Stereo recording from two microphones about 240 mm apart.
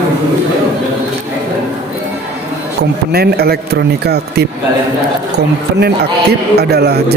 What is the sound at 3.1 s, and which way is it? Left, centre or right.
Speech, right.